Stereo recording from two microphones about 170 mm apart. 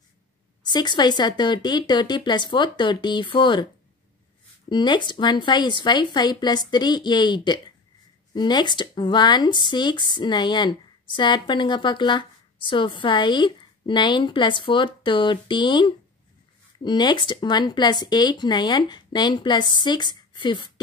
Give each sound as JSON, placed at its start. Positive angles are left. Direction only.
{"t": 0.7, "sound": "speech", "side_deg": 25}
{"t": 4.6, "sound": "speech", "side_deg": 25}